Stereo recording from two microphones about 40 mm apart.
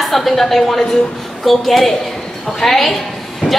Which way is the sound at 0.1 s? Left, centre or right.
Centre.